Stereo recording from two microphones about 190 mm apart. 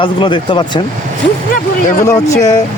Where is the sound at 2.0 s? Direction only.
15° left (ahead or behind).